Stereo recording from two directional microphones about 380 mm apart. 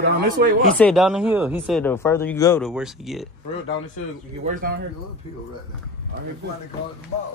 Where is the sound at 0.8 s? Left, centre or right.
Centre.